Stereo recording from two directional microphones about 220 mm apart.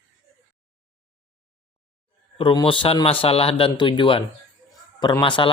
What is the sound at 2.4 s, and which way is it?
Speech, 25° left (ahead or behind).